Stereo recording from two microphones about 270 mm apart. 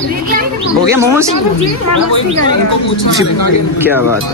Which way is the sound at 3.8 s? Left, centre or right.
Centre.